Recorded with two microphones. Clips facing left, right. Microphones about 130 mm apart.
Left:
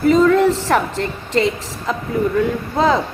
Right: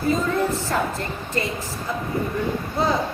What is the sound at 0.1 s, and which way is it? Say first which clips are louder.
A woman's voice: left 9 dB; 90° left.